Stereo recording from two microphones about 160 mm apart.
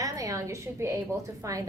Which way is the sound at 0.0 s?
20° right (ahead or behind).